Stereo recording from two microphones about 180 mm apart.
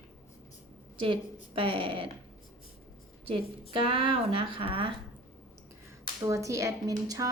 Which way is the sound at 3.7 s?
30° right (ahead or behind).